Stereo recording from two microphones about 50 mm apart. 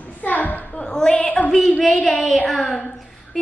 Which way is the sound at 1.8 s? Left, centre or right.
Centre.